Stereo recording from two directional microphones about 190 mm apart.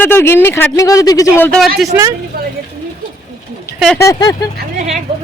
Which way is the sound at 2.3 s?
50° right (ahead or behind).